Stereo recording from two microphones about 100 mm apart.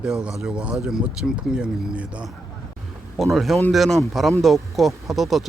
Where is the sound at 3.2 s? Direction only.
Centre (ahead or behind).